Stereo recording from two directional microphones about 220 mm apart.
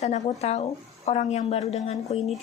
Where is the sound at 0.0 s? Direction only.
30° left (ahead or behind).